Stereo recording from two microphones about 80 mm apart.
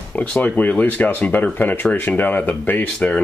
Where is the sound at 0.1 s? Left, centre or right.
Centre.